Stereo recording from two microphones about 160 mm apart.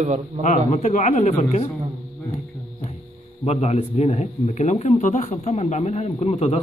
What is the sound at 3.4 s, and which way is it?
Speech, 40° left (ahead or behind).